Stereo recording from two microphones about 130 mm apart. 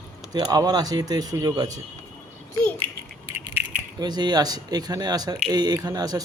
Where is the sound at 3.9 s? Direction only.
30° right (ahead or behind).